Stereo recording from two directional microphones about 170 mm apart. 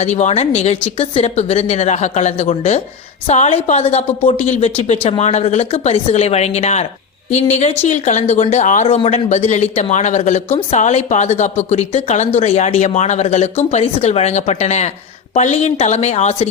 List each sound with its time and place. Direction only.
0.0 s speech: 40° left (ahead or behind)